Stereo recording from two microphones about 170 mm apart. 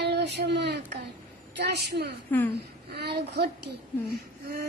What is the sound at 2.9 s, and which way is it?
Speech, 75° right (ahead or behind).